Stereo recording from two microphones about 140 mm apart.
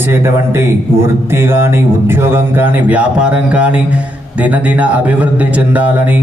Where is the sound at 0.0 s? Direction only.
15° right (ahead or behind).